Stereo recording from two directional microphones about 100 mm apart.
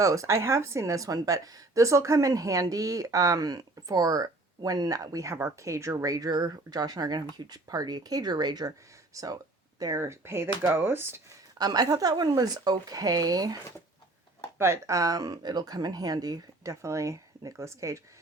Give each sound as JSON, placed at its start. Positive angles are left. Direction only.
{"t": 0.0, "sound": "a woman's voice", "side_deg": -30}
{"t": 11.5, "sound": "a woman's voice", "side_deg": -40}
{"t": 14.6, "sound": "a woman's voice", "side_deg": -30}